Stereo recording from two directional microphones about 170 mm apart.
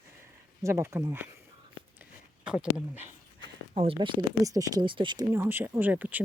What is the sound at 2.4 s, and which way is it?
Speech, 5° right (ahead or behind).